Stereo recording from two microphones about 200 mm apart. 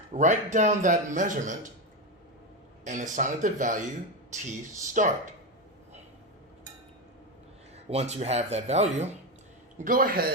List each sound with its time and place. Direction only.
0.1 s speech: 35° right (ahead or behind)
2.8 s speech: 40° right (ahead or behind)
4.9 s speech: 40° right (ahead or behind)
7.9 s speech: 30° right (ahead or behind)
9.7 s a man's voice: 45° right (ahead or behind)